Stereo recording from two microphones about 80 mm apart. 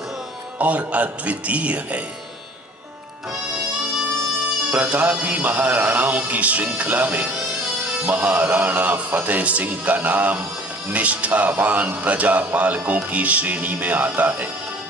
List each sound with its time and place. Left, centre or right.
0.6 s speech: centre
4.6 s speech: right